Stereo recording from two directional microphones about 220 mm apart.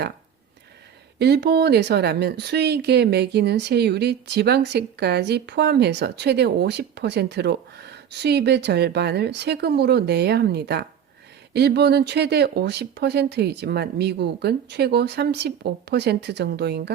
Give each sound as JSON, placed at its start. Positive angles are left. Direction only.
{"t": 1.2, "sound": "speech", "side_deg": -50}